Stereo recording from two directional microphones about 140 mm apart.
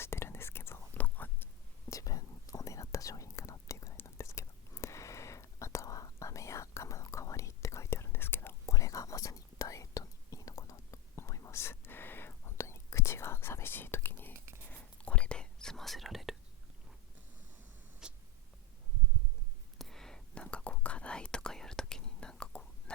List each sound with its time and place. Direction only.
0.0 s whispering: 15° left (ahead or behind)
1.9 s whispering: 25° left (ahead or behind)
14.3 s a sound: 20° right (ahead or behind)
14.7 s whispering: 10° left (ahead or behind)
18.0 s a sound: 5° right (ahead or behind)
19.8 s whispering: 5° left (ahead or behind)